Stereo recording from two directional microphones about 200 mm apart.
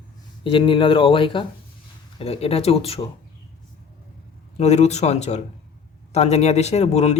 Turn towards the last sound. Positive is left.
turn(degrees=35)  # may be behind; listen again after turning